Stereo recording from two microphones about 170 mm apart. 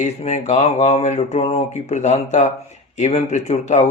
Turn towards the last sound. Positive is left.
turn(degrees=45)  # may be behind; listen again after turning